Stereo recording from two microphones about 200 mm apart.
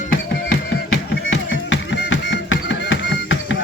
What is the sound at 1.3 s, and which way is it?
Music, 70° left (ahead or behind).